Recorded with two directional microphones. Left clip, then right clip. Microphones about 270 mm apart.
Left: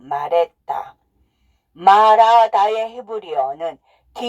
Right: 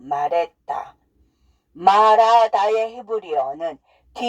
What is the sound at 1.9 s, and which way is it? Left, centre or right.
Speech, left.